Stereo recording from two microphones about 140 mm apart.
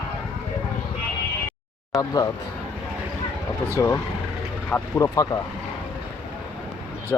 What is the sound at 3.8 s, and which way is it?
Speech, 20° left (ahead or behind).